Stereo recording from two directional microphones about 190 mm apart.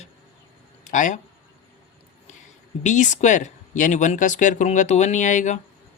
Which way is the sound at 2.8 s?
40° left (ahead or behind).